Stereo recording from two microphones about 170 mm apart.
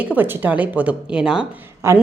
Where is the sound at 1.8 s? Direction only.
15° right (ahead or behind).